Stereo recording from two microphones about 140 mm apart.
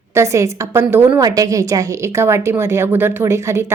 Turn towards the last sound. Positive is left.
turn(degrees=-20)  # may be behind; listen again after turning